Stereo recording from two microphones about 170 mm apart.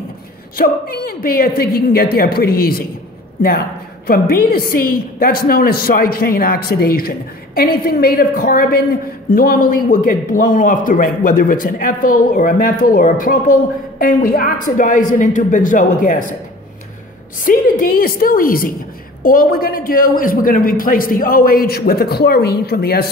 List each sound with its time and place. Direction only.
0.6 s a woman's voice: 60° left (ahead or behind)
4.1 s a woman's voice: 60° left (ahead or behind)
17.5 s a woman's voice: 55° left (ahead or behind)